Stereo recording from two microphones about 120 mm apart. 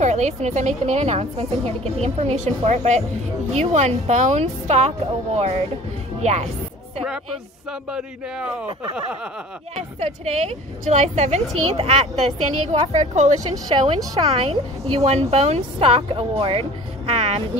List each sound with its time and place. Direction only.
0.0 s a woman's voice: 75° right (ahead or behind)
9.8 s a woman's voice: 65° right (ahead or behind)
11.5 s a woman's voice: 55° right (ahead or behind)
12.7 s a woman's voice: 65° right (ahead or behind)
13.4 s speech: 35° right (ahead or behind)
14.4 s a woman's voice: 55° right (ahead or behind)